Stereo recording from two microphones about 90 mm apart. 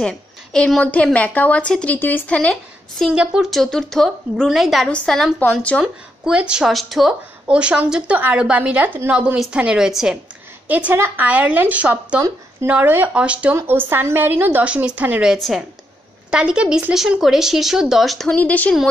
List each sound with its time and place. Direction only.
0.0 s a woman's voice: 10° left (ahead or behind)
3.1 s a woman's voice: 10° right (ahead or behind)
3.4 s speech: 5° left (ahead or behind)
4.8 s a woman's voice: 10° left (ahead or behind)
5.8 s a woman's voice: 10° right (ahead or behind)
6.7 s speech: centre (ahead or behind)
7.4 s a woman's voice: 10° right (ahead or behind)
10.9 s a woman's voice: 20° right (ahead or behind)
13.6 s a woman's voice: 25° right (ahead or behind)
15.3 s speech: centre (ahead or behind)
16.3 s a woman's voice: 10° right (ahead or behind)
18.3 s a woman's voice: 20° left (ahead or behind)